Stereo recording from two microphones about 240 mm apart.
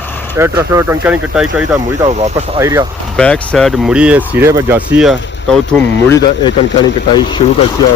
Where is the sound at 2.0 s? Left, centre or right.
Right.